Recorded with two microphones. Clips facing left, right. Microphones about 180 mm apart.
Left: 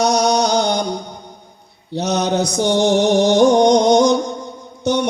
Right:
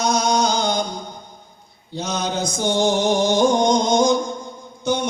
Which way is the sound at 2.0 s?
65° left (ahead or behind).